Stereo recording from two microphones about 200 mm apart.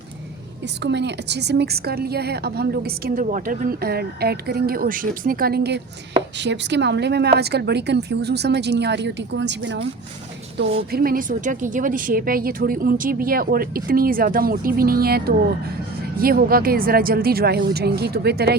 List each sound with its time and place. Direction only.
0.6 s a woman's voice: 60° right (ahead or behind)
10.6 s a woman's voice: 50° right (ahead or behind)